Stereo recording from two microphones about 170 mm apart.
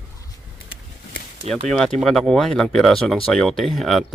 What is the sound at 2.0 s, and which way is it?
Speech, 5° left (ahead or behind).